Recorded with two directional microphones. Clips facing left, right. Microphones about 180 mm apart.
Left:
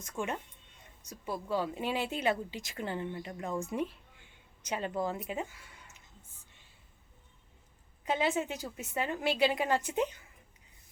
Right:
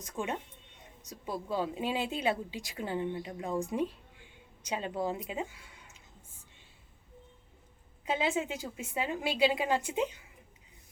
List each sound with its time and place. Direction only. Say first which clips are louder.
0.0 s speech: even; 15° right (ahead or behind)
1.5 s speech: even; 15° right (ahead or behind)
8.2 s speech: even; 15° right (ahead or behind)